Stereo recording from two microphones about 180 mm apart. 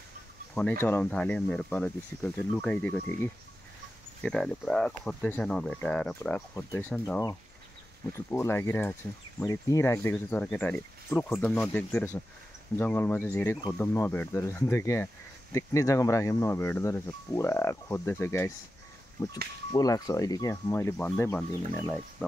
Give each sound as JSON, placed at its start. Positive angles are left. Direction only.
{"t": 0.6, "sound": "speech", "side_deg": 10}
{"t": 8.3, "sound": "speech", "side_deg": 15}